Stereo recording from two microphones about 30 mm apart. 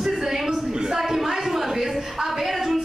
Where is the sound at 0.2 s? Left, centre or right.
Centre.